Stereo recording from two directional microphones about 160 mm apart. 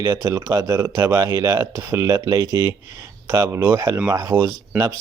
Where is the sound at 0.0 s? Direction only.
15° right (ahead or behind).